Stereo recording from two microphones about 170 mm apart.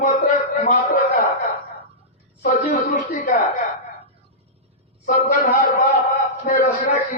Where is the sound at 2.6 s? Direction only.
55° left (ahead or behind).